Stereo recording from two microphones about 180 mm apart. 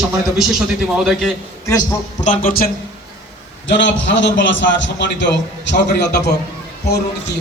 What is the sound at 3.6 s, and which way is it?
A man's voice, 90° left.